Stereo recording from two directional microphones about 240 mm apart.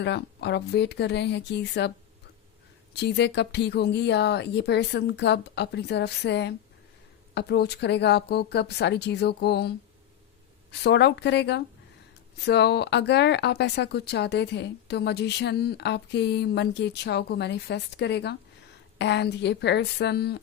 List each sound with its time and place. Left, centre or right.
0.0 s speech: left
2.9 s speech: left